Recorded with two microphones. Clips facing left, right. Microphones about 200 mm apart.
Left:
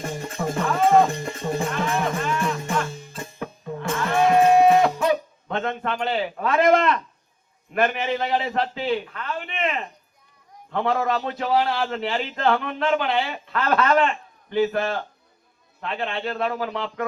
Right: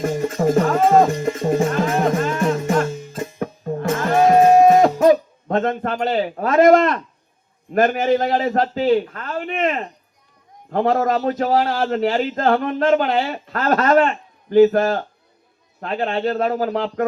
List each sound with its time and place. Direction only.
0.0 s music: 40° right (ahead or behind)
7.7 s a man's voice: 40° right (ahead or behind)